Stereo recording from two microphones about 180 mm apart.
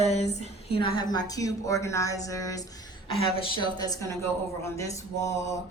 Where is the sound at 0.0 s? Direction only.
35° left (ahead or behind); by 5.0 s 15° left (ahead or behind).